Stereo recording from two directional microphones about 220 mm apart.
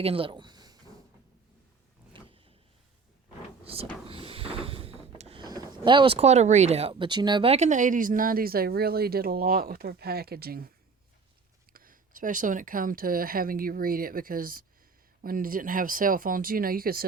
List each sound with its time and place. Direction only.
0.0 s speech: 25° right (ahead or behind)
2.1 s vehicle: 20° right (ahead or behind)
3.6 s speech: 25° right (ahead or behind); by 10.7 s 45° right (ahead or behind)
11.7 s speech: 40° right (ahead or behind)